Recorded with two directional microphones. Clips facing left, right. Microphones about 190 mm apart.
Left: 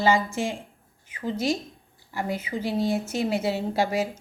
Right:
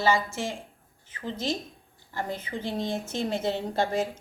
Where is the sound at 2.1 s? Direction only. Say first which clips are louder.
Left 3 dB; 10° left (ahead or behind).